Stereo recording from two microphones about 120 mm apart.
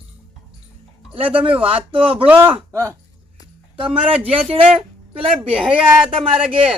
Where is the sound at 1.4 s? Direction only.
50° right (ahead or behind).